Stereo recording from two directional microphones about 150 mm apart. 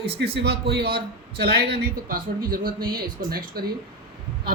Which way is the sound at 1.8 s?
75° right (ahead or behind).